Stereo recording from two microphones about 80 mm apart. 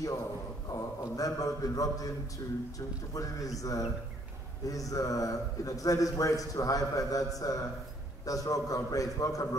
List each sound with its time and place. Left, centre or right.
0.7 s a man's voice: left
3.2 s a man's voice: left